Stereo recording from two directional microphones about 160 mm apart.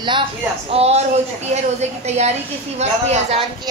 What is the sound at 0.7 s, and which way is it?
Speech, 40° right (ahead or behind).